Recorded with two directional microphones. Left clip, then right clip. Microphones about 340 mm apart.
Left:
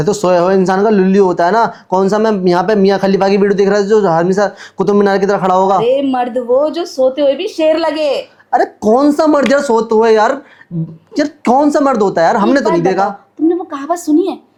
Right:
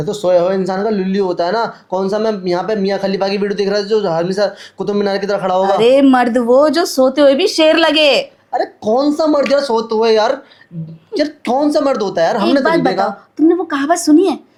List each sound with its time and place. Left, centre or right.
0.0 s speech: left
5.8 s speech: right
8.4 s speech: left
13.7 s a woman's voice: centre